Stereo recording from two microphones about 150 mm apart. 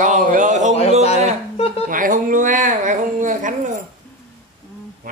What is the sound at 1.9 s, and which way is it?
Speech, 60° right (ahead or behind).